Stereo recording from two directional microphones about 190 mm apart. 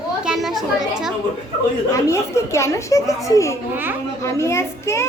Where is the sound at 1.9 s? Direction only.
15° left (ahead or behind).